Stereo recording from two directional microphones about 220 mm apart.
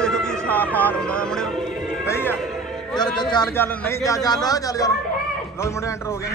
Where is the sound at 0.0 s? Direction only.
5° left (ahead or behind).